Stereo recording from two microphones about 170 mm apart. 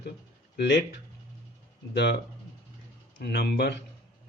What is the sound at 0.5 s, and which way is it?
Speech, 70° left (ahead or behind).